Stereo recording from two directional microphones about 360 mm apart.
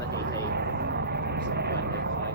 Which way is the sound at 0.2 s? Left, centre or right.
Right.